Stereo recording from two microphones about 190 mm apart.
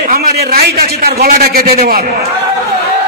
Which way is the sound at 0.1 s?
50° right (ahead or behind).